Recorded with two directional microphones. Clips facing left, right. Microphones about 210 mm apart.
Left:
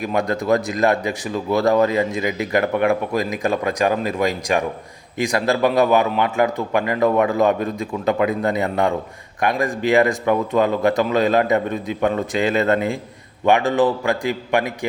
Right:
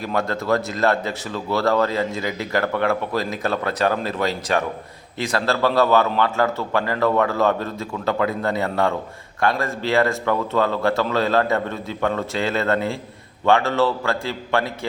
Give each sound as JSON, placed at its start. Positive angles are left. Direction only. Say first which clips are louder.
{"t": 0.0, "sound": "speech", "louder": "left 3 dB", "side_deg": 15}